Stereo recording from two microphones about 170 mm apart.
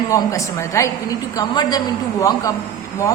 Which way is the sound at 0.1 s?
20° left (ahead or behind).